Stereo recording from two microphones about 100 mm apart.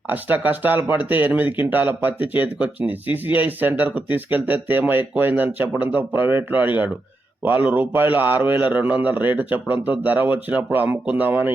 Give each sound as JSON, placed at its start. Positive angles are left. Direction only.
{"t": 0.1, "sound": "speech", "side_deg": -15}